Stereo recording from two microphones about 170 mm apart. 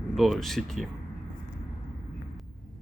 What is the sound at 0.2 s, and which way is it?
Speech, centre (ahead or behind).